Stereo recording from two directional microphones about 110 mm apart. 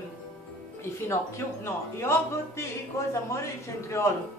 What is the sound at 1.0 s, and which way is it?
A woman's voice, 25° left (ahead or behind).